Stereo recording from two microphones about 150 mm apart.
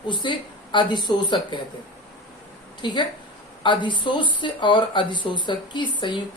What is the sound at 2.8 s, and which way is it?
Speech, 30° left (ahead or behind).